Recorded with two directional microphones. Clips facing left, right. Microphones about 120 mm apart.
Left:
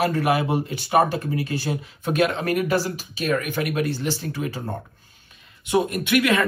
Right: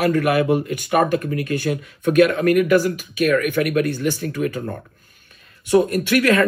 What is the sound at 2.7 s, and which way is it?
Speech, 50° right (ahead or behind).